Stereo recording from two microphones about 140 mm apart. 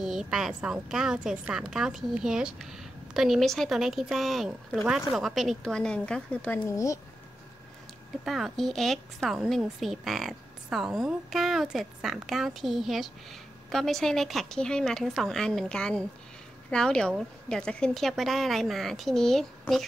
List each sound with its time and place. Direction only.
0.0 s a woman's voice: 5° right (ahead or behind)
6.6 s speech: 25° left (ahead or behind)
8.3 s a woman's voice: centre (ahead or behind)